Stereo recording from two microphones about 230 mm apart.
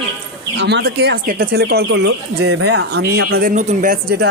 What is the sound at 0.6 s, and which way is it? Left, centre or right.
Speech, right.